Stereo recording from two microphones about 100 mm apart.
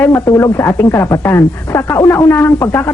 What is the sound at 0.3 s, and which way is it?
A man's voice, 35° left (ahead or behind).